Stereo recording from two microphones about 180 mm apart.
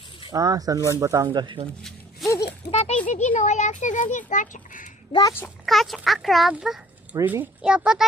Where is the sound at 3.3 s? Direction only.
40° left (ahead or behind).